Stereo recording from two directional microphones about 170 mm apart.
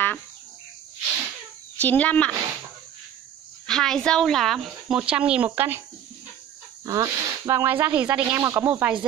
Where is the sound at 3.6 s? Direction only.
5° left (ahead or behind); by 5.8 s 15° right (ahead or behind).